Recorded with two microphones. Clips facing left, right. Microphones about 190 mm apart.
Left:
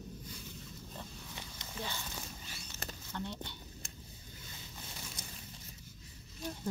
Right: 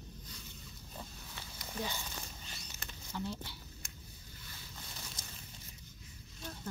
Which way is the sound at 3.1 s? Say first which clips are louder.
Right 2 dB; 5° right (ahead or behind).